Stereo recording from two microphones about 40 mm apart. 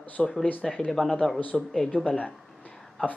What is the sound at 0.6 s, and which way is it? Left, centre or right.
Speech, left.